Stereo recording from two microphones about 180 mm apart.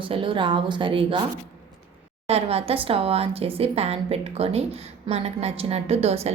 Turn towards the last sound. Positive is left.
turn(degrees=-35)  # may be behind; listen again after turning